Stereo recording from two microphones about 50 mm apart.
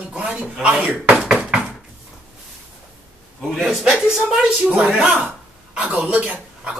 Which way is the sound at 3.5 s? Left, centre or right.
Centre.